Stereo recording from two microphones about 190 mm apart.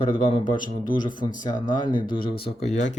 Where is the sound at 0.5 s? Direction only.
45° left (ahead or behind).